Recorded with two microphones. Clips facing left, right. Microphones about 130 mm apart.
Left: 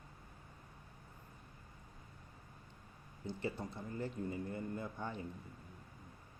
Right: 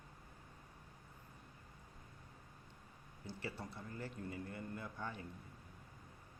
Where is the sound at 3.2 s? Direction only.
20° left (ahead or behind).